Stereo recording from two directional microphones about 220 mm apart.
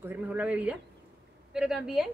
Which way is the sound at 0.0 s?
10° right (ahead or behind).